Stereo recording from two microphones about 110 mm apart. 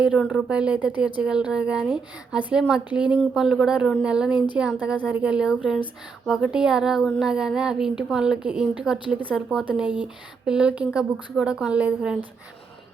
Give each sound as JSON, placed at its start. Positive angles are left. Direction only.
{"t": 0.0, "sound": "speech", "side_deg": -10}